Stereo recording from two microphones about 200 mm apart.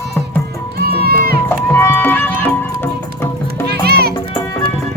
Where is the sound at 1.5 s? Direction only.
10° left (ahead or behind).